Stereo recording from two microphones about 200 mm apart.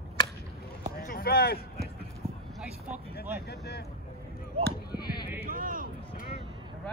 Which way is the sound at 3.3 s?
50° left (ahead or behind).